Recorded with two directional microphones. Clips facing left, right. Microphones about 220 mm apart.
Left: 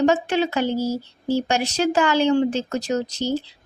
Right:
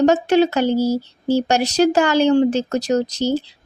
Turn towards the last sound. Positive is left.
turn(degrees=-40)  # may be behind; listen again after turning